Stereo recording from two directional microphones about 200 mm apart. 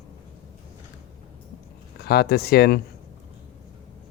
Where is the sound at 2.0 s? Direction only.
50° left (ahead or behind).